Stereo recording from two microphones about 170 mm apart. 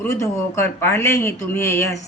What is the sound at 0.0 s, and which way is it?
Speech, 15° left (ahead or behind).